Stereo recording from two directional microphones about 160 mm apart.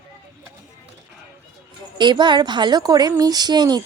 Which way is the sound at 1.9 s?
30° right (ahead or behind).